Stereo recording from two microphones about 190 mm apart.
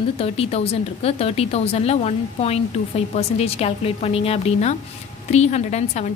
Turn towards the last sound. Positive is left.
turn(degrees=35)  # may be behind; listen again after turning